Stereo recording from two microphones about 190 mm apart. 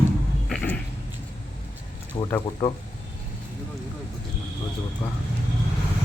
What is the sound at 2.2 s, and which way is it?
Speech, 25° left (ahead or behind).